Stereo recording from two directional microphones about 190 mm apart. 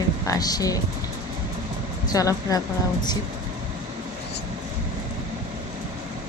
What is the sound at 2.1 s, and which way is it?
Speech, 20° left (ahead or behind).